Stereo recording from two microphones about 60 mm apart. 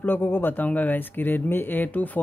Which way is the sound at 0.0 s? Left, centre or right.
Left.